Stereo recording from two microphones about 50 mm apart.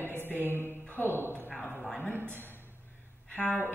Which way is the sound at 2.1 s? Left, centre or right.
Right.